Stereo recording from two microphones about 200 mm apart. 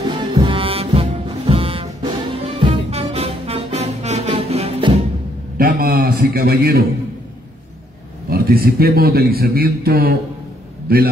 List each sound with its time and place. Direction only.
0.1 s music: 25° right (ahead or behind)
5.6 s a sound: 45° right (ahead or behind)
8.3 s a man's voice: 50° right (ahead or behind)